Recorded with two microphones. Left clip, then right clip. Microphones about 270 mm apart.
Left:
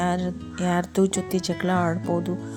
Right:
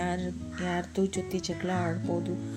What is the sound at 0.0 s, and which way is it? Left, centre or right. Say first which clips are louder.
Speech: left 7 dB; centre.